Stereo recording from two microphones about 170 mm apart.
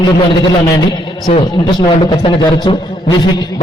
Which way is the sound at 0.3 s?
25° left (ahead or behind).